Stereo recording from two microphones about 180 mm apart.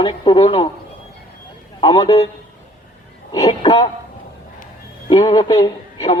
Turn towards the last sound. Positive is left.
turn(degrees=20)  # may be behind; listen again after turning